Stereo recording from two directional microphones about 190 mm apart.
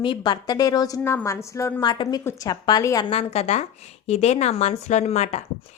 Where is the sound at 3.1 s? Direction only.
35° left (ahead or behind).